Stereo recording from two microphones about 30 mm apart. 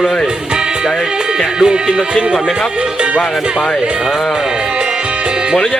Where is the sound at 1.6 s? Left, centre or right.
Right.